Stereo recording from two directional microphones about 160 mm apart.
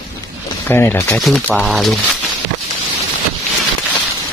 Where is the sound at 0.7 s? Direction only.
15° left (ahead or behind).